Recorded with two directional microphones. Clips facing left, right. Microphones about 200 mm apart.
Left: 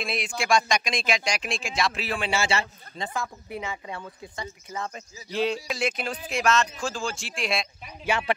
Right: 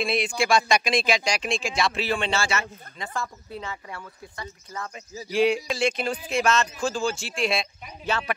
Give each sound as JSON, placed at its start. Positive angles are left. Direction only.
{"t": 0.0, "sound": "speech", "side_deg": 0}
{"t": 3.4, "sound": "speech", "side_deg": 15}
{"t": 5.3, "sound": "speech", "side_deg": -15}
{"t": 5.7, "sound": "speech", "side_deg": 0}
{"t": 8.0, "sound": "speech", "side_deg": 15}